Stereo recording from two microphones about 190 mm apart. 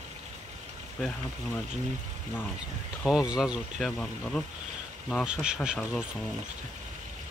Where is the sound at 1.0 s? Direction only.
Centre (ahead or behind).